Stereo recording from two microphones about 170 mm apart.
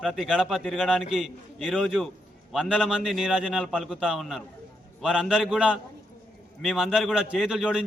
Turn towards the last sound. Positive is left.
turn(degrees=-5)  # may be behind; listen again after turning